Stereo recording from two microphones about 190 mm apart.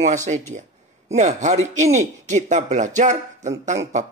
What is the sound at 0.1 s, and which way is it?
Speech, 40° right (ahead or behind).